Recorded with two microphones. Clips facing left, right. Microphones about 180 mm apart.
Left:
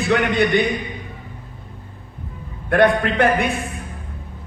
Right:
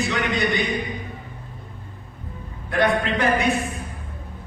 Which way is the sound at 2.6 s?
60° left (ahead or behind).